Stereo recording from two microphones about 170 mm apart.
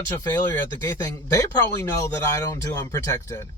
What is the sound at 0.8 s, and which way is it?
Speech, 15° left (ahead or behind).